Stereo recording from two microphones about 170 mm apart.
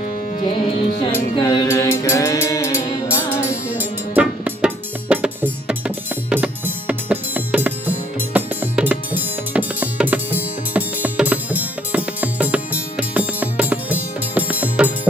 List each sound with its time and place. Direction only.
1.4 s music: 15° left (ahead or behind)
3.4 s music: 10° right (ahead or behind)